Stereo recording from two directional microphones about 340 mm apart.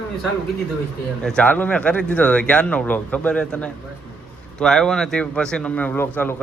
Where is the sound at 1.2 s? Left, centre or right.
Centre.